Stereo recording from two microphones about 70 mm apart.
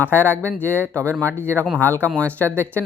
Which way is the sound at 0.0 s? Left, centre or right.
Left.